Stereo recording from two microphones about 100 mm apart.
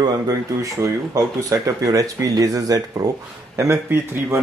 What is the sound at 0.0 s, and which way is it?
Speech, 35° right (ahead or behind).